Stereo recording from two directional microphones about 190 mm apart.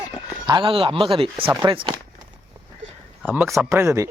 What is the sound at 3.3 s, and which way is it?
Speech, 10° right (ahead or behind).